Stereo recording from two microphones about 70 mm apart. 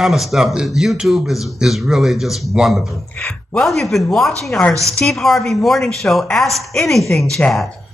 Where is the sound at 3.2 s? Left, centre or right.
Centre.